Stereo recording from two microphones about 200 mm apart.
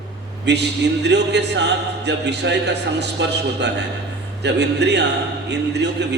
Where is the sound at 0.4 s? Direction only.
60° right (ahead or behind).